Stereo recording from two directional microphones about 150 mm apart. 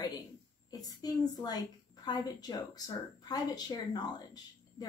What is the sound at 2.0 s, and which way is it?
Speech, 25° left (ahead or behind).